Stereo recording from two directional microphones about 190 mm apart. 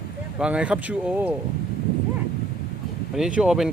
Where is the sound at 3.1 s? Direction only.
5° right (ahead or behind).